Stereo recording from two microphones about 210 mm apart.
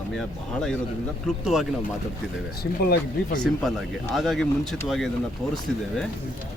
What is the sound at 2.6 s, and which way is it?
Speech, 45° left (ahead or behind).